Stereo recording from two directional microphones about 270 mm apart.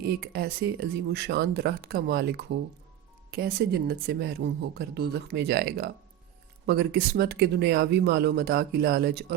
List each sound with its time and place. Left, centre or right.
0.0 s speech: right